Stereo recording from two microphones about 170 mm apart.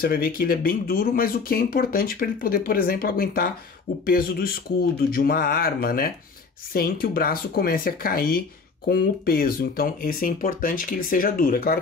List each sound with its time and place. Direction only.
0.0 s speech: 60° left (ahead or behind)